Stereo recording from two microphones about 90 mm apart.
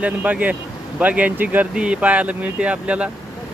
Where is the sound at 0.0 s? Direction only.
15° right (ahead or behind).